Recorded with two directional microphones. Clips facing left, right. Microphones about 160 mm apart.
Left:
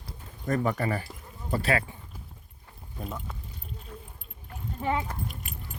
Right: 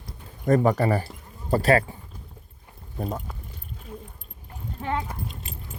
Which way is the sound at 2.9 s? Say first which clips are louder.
Right 7 dB; 45° right (ahead or behind).